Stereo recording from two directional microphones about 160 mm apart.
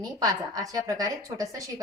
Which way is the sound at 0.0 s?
25° right (ahead or behind).